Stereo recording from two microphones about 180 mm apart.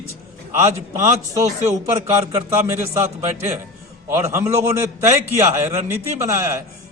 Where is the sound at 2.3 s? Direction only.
15° right (ahead or behind).